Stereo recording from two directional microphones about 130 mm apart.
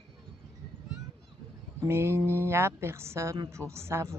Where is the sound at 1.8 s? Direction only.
20° right (ahead or behind).